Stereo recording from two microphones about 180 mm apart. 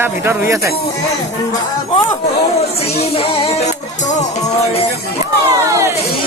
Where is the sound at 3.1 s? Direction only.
30° left (ahead or behind).